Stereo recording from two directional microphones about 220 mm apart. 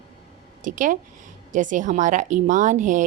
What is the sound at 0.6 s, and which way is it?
Speech, 35° right (ahead or behind).